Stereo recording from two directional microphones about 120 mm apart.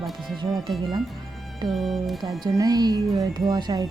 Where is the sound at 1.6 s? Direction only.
Centre (ahead or behind).